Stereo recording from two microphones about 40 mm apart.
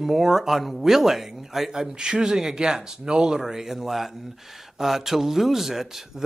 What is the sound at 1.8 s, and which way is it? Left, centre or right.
Speech, centre.